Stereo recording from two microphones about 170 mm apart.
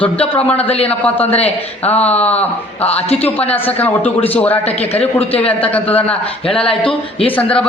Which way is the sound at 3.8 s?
10° left (ahead or behind).